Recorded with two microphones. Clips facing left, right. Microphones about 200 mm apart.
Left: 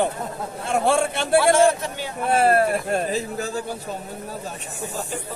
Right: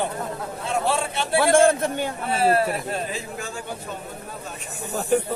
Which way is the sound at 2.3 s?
55° left (ahead or behind).